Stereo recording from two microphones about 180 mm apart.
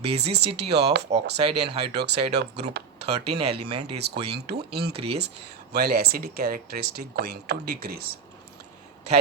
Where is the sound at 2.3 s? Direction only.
70° right (ahead or behind).